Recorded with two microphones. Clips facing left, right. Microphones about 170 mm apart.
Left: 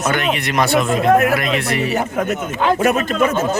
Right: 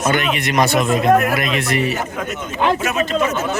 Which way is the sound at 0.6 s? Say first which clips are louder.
Left 1 dB; 20° right (ahead or behind).